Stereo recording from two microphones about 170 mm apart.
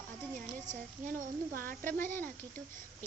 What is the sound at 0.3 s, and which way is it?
A woman's voice, 50° right (ahead or behind).